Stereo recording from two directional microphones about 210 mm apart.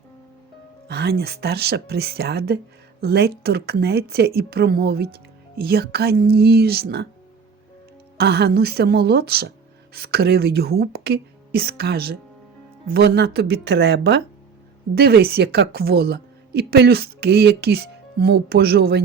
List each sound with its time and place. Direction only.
0.9 s a woman's voice: 50° right (ahead or behind)
8.2 s a woman's voice: 50° right (ahead or behind)